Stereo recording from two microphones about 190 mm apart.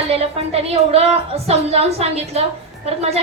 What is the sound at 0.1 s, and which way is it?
A woman's voice, 30° right (ahead or behind).